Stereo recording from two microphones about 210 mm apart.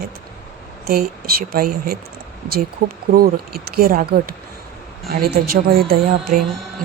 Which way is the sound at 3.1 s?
45° right (ahead or behind).